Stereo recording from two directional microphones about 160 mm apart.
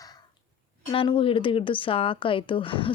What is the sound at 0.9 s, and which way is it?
A woman's voice, 35° left (ahead or behind).